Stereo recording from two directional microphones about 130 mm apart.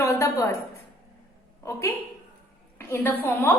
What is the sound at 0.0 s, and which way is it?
Speech, 20° left (ahead or behind).